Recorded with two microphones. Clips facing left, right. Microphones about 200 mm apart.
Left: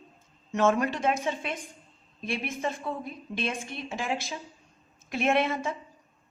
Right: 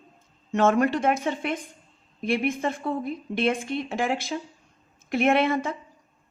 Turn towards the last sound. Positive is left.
turn(degrees=-55)  # may be behind; listen again after turning